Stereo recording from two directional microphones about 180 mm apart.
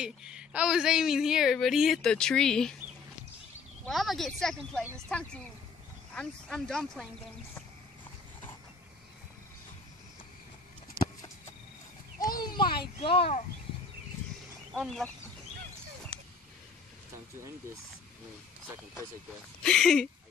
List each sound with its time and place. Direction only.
0.0 s a woman's voice: 5° right (ahead or behind)
3.8 s a woman's voice: centre (ahead or behind)
12.3 s a sound: 55° left (ahead or behind)
13.0 s speech: 30° left (ahead or behind)
14.7 s speech: centre (ahead or behind)
19.6 s a woman's voice: 5° left (ahead or behind)